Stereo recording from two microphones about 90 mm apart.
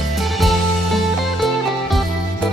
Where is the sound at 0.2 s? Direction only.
Centre (ahead or behind).